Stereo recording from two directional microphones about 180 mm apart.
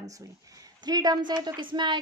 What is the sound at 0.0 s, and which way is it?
A woman's voice, 20° right (ahead or behind).